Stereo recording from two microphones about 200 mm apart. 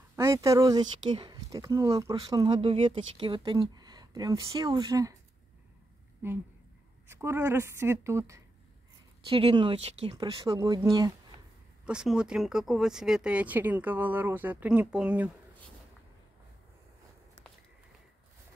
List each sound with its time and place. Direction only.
0.1 s speech: 15° right (ahead or behind)
6.2 s a woman's voice: 10° right (ahead or behind)
9.3 s speech: 25° right (ahead or behind)
11.8 s speech: 5° right (ahead or behind)